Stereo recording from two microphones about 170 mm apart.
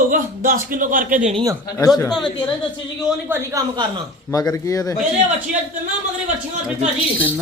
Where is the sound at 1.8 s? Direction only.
20° left (ahead or behind).